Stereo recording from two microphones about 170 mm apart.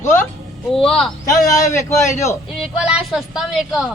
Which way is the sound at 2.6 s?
5° right (ahead or behind).